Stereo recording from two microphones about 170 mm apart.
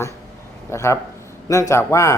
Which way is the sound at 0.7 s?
15° left (ahead or behind).